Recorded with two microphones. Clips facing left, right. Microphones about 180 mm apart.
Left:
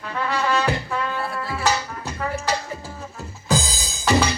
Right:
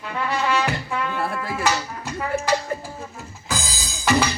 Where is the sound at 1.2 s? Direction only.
50° right (ahead or behind).